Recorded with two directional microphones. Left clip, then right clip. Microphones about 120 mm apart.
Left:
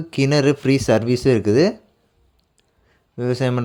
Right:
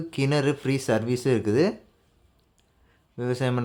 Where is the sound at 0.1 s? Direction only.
45° left (ahead or behind).